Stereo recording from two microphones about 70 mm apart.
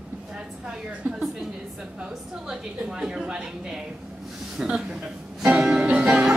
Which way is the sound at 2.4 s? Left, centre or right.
Centre.